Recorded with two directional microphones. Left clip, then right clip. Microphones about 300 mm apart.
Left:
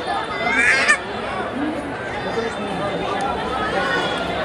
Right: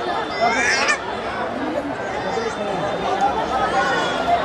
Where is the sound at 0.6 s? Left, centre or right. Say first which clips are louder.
Left 3 dB; centre.